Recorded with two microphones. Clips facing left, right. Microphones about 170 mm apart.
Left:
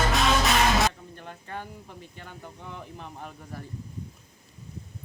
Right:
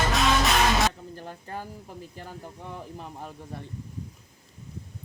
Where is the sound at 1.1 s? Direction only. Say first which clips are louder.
Right 2 dB; 35° right (ahead or behind).